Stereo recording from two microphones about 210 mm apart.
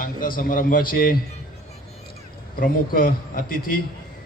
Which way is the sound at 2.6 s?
40° left (ahead or behind).